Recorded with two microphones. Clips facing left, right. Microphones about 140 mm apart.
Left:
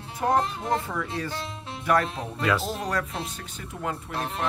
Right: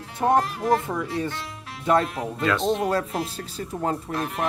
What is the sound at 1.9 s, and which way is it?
Speech, 25° right (ahead or behind).